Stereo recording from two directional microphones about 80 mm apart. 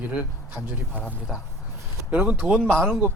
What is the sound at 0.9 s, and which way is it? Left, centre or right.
Speech, right.